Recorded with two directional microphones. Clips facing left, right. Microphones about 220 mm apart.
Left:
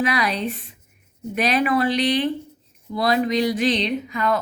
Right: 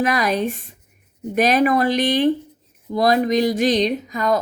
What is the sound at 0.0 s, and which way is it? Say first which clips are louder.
Speech: right 3 dB; 45° right (ahead or behind).